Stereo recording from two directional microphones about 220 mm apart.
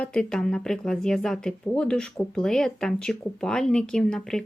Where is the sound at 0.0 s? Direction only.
5° left (ahead or behind).